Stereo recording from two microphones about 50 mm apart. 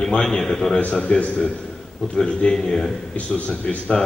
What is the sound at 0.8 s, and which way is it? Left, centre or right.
A man's voice, left.